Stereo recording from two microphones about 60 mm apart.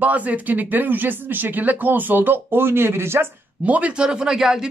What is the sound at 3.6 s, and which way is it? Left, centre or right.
Speech, right.